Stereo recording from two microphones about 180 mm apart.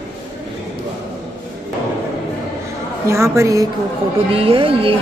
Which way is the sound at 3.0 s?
15° right (ahead or behind).